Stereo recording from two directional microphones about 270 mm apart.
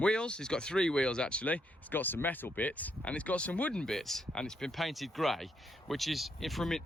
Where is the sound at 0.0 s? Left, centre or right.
Centre.